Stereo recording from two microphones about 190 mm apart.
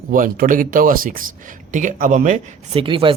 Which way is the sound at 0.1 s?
45° right (ahead or behind).